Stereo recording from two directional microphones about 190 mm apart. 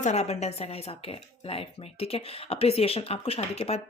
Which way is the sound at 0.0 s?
35° left (ahead or behind).